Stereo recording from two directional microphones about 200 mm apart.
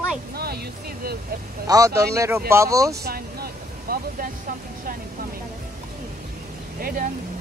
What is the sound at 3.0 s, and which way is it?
Vehicle, 50° right (ahead or behind).